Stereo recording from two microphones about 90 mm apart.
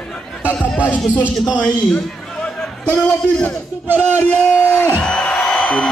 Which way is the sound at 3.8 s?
20° right (ahead or behind).